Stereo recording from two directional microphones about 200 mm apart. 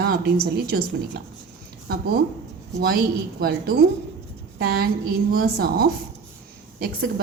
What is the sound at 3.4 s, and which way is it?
A woman's voice, 50° right (ahead or behind).